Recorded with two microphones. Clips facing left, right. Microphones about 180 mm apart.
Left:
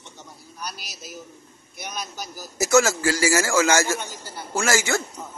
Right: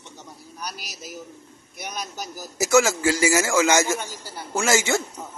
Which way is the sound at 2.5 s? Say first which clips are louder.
Even; 15° right (ahead or behind).